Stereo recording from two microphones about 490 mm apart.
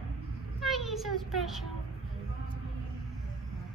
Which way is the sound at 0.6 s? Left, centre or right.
Centre.